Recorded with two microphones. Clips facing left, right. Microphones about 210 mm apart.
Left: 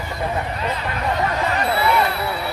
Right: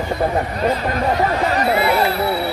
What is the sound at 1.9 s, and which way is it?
Speech, 35° right (ahead or behind).